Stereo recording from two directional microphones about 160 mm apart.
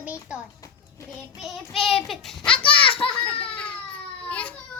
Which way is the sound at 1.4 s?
Centre (ahead or behind).